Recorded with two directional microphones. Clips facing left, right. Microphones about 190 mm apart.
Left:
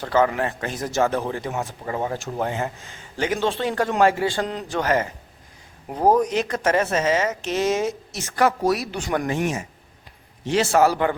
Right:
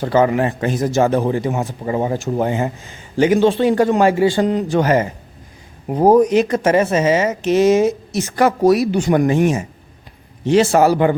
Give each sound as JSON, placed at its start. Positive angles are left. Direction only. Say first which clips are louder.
{"t": 0.0, "sound": "a woman's voice", "louder": "right 5 dB", "side_deg": -10}
{"t": 6.1, "sound": "a woman's voice", "louder": "right 9 dB", "side_deg": -10}